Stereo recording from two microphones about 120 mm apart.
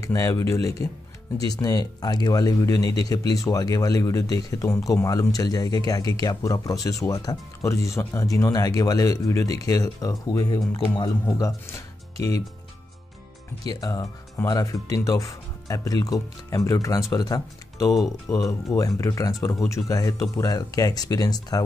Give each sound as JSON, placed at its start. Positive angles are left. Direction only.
{"t": 0.0, "sound": "speech", "side_deg": 25}
{"t": 13.7, "sound": "speech", "side_deg": 30}